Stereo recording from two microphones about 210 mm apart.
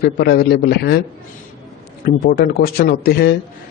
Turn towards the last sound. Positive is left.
turn(degrees=50)  # may be behind; listen again after turning